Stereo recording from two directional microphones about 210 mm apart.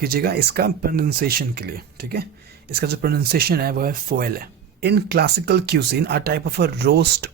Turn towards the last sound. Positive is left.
turn(degrees=-50)  # may be behind; listen again after turning